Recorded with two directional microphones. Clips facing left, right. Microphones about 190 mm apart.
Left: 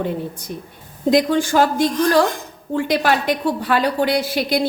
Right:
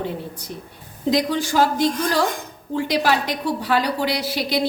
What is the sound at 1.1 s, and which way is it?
A woman's voice, 50° left (ahead or behind).